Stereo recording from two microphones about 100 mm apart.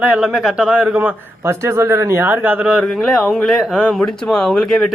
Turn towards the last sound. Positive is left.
turn(degrees=5)  # may be behind; listen again after turning